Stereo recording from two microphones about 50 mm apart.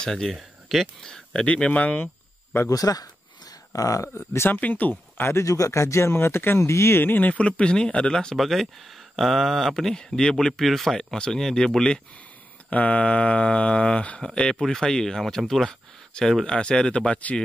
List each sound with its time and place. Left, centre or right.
0.0 s speech: centre
0.3 s speech: centre
1.0 s speech: centre
1.5 s speech: left
2.9 s speech: left
4.2 s speech: left
4.5 s speech: left
5.4 s speech: left
6.7 s speech: left
7.0 s speech: left
7.3 s speech: left
8.4 s speech: centre
12.6 s speech: left
14.6 s speech: centre